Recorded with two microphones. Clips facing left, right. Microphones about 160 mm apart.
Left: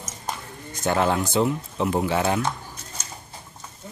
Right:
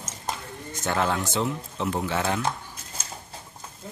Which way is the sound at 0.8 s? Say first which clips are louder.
Left 4 dB; 20° left (ahead or behind).